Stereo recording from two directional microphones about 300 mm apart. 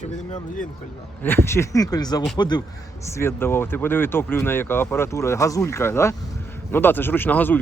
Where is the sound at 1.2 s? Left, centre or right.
Centre.